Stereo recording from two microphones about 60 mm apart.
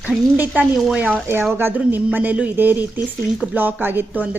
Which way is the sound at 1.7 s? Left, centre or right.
Right.